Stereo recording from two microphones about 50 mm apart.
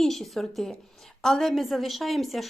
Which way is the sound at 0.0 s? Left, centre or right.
Centre.